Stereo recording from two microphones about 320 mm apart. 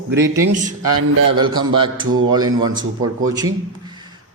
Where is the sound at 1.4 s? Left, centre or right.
Centre.